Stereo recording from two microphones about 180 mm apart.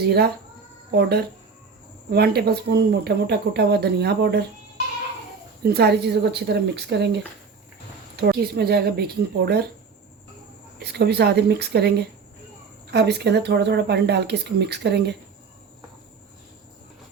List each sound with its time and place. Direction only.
0.0 s speech: 65° right (ahead or behind)
5.6 s speech: 65° right (ahead or behind)
10.8 s speech: 65° right (ahead or behind)